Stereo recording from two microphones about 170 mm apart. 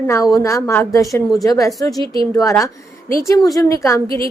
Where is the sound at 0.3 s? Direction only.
20° left (ahead or behind).